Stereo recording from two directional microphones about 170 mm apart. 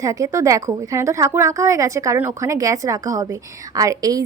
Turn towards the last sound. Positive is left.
turn(degrees=-20)  # may be behind; listen again after turning